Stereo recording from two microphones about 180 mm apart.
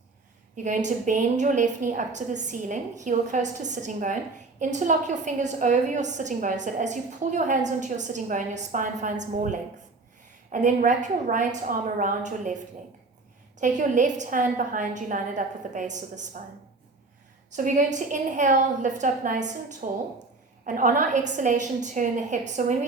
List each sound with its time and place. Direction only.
0.5 s a woman's voice: 45° right (ahead or behind)
17.6 s a woman's voice: 45° right (ahead or behind)